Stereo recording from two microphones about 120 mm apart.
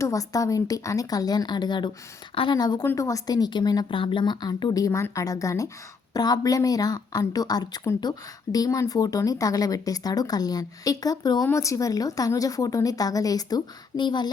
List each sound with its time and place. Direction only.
0.0 s a woman's voice: 30° left (ahead or behind); by 2.6 s 50° left (ahead or behind)
2.6 s a woman's voice: 35° left (ahead or behind)